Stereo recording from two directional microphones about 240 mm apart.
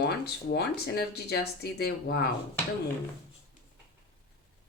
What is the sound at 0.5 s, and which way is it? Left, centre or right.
Speech, left.